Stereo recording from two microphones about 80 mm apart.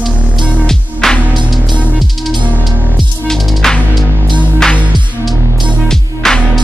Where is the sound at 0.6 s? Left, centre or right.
Centre.